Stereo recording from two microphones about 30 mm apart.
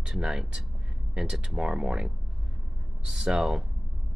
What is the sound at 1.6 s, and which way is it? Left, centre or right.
Speech, right.